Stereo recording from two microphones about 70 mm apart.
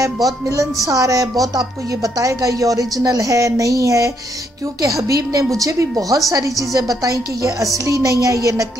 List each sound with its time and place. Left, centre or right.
0.0 s a woman's voice: right